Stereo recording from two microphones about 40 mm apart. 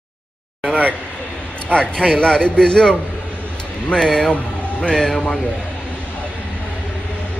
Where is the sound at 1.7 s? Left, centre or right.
Left.